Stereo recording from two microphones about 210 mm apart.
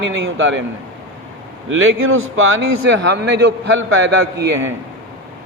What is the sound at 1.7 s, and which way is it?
Speech, 75° right (ahead or behind).